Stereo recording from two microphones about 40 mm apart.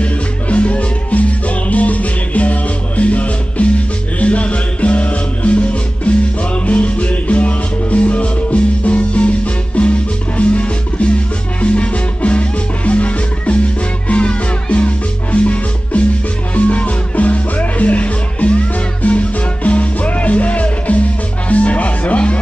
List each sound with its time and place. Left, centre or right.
0.0 s music: left